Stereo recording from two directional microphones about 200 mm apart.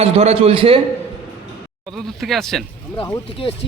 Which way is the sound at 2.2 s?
Centre (ahead or behind).